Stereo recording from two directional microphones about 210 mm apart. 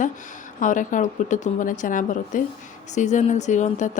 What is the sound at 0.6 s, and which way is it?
A woman's voice, 35° left (ahead or behind).